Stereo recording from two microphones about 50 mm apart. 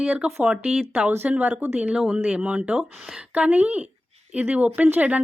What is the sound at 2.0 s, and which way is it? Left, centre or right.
Speech, centre.